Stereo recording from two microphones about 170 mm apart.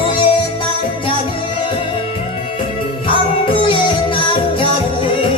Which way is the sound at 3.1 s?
30° left (ahead or behind).